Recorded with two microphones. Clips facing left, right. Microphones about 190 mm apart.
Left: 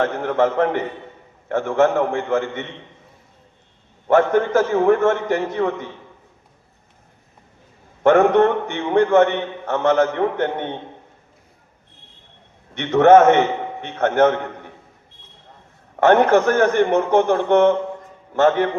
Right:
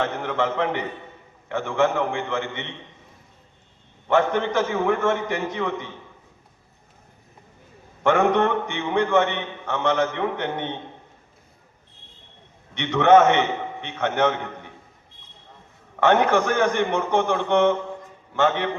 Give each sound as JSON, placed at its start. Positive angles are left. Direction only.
{"t": 0.2, "sound": "a man's voice", "side_deg": 45}
{"t": 4.1, "sound": "a man's voice", "side_deg": 45}
{"t": 8.0, "sound": "a man's voice", "side_deg": 40}
{"t": 12.7, "sound": "a man's voice", "side_deg": 45}
{"t": 16.0, "sound": "a man's voice", "side_deg": 45}